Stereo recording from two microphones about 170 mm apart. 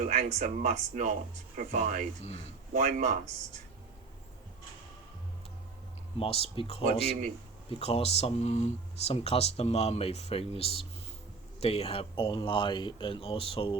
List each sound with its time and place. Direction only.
0.0 s speech: 45° right (ahead or behind)
6.1 s speech: 35° left (ahead or behind)
7.0 s speech: 35° right (ahead or behind)
7.7 s speech: 35° left (ahead or behind)